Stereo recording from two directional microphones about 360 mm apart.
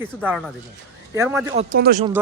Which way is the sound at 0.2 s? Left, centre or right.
Centre.